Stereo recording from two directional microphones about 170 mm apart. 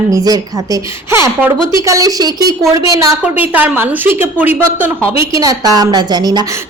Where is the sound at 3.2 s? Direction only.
10° right (ahead or behind).